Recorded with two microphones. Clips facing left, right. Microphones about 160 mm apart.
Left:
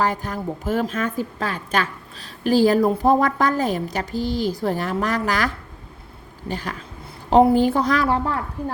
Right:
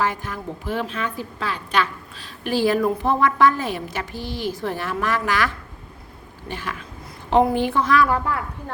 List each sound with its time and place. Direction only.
0.0 s a woman's voice: 40° left (ahead or behind)
6.5 s a woman's voice: 40° left (ahead or behind)